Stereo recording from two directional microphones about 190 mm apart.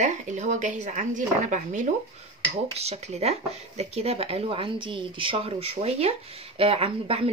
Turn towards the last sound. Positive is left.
turn(degrees=-30)  # may be behind; listen again after turning